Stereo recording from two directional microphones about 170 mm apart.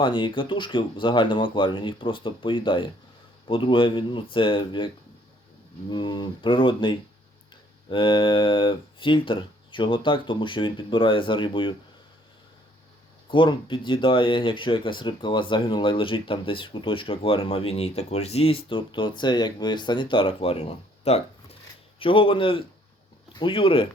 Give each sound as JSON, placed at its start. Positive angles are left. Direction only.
{"t": 0.0, "sound": "speech", "side_deg": 30}
{"t": 5.9, "sound": "speech", "side_deg": 25}
{"t": 13.3, "sound": "speech", "side_deg": 30}